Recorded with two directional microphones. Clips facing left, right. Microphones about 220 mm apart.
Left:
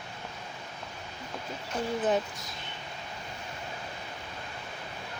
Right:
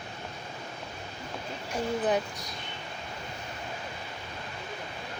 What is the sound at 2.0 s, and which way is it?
Speech, centre (ahead or behind).